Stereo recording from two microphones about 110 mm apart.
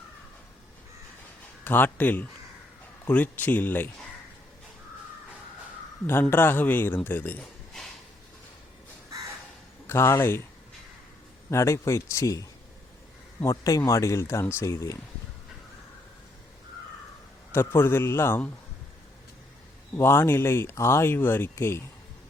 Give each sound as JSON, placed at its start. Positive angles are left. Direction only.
{"t": 1.6, "sound": "speech", "side_deg": 20}
{"t": 6.3, "sound": "speech", "side_deg": 20}
{"t": 9.8, "sound": "speech", "side_deg": 25}
{"t": 11.5, "sound": "speech", "side_deg": 25}
{"t": 17.5, "sound": "speech", "side_deg": 20}
{"t": 20.0, "sound": "speech", "side_deg": 25}